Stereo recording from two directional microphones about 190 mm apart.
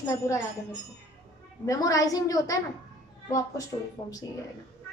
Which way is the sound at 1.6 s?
20° left (ahead or behind).